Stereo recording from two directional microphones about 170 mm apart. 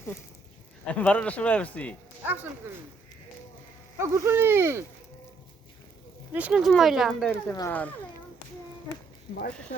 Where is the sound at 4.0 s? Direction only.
15° right (ahead or behind).